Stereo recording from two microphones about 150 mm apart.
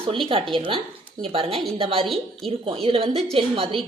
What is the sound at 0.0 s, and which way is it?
A woman's voice, 35° right (ahead or behind).